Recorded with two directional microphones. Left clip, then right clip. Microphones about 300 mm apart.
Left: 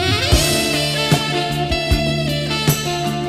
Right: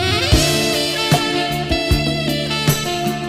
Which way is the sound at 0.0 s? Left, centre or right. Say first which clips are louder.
Right 1 dB; centre.